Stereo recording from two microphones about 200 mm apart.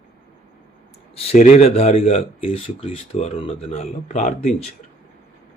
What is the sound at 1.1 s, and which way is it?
Speech, 30° left (ahead or behind).